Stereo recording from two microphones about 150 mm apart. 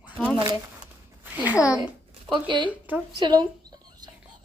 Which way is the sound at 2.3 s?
30° right (ahead or behind).